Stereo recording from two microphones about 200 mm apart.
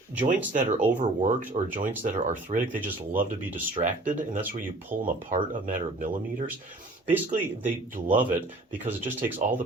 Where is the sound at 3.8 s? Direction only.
30° right (ahead or behind).